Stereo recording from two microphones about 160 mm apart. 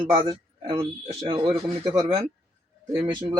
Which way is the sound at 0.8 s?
35° right (ahead or behind).